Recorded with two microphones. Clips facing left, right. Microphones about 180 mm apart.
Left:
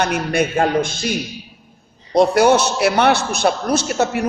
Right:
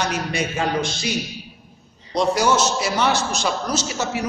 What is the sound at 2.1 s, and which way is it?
A man's voice, 60° left (ahead or behind).